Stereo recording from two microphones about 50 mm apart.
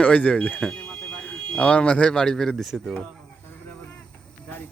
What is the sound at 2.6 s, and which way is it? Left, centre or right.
Speech, centre.